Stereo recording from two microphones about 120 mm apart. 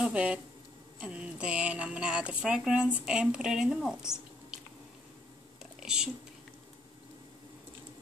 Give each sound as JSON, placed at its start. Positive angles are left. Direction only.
{"t": 0.0, "sound": "speech", "side_deg": -10}
{"t": 5.8, "sound": "whispering", "side_deg": -5}